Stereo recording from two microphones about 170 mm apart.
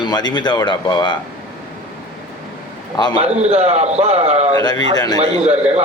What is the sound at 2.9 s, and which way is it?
Speech, 25° left (ahead or behind).